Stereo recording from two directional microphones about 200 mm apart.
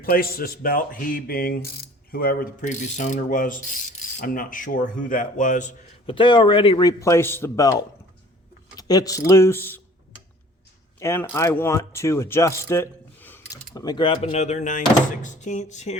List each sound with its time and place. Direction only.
0.0 s a man's voice: 50° left (ahead or behind)
6.1 s a man's voice: 25° left (ahead or behind)
11.0 s speech: 10° left (ahead or behind); by 16.0 s 35° left (ahead or behind)